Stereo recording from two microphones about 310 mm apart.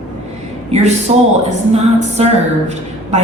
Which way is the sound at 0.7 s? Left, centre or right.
Right.